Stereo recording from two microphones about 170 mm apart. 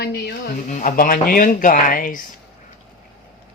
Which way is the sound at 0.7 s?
45° left (ahead or behind).